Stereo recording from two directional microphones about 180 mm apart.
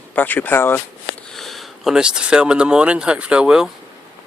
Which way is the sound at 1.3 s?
Centre (ahead or behind).